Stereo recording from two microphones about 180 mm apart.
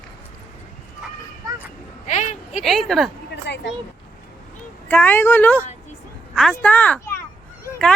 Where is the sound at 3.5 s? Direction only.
70° left (ahead or behind).